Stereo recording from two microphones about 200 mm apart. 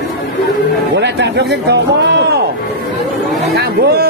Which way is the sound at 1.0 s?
60° right (ahead or behind).